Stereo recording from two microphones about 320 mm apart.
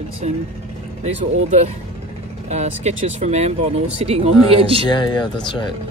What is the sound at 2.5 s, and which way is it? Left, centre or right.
Speech, centre.